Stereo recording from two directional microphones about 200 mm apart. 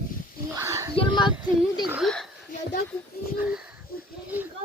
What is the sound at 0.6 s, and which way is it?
Speech, 15° right (ahead or behind).